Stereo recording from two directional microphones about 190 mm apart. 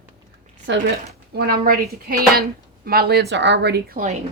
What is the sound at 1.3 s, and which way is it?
Speech, 55° right (ahead or behind).